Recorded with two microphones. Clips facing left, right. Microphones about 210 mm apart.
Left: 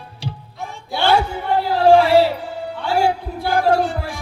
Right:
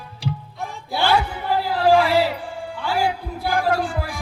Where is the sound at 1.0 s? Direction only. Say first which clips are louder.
Left 3 dB; 30° left (ahead or behind).